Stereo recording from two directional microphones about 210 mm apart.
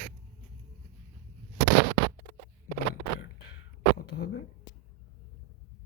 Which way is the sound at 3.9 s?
50° left (ahead or behind).